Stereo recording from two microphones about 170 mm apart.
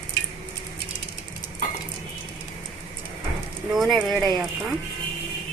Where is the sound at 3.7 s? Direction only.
Centre (ahead or behind).